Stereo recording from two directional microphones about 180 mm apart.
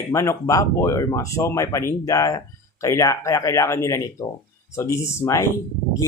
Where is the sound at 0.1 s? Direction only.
15° left (ahead or behind).